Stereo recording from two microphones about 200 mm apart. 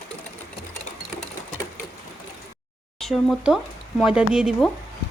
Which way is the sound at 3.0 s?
Centre (ahead or behind).